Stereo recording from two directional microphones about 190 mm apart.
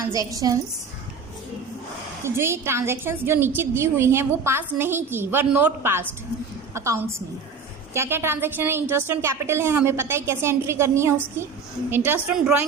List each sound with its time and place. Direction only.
0.2 s a woman's voice: 20° right (ahead or behind)
2.2 s a woman's voice: 15° right (ahead or behind)